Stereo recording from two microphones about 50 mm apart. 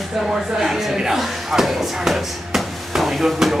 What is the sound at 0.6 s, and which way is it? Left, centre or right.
Speech, centre.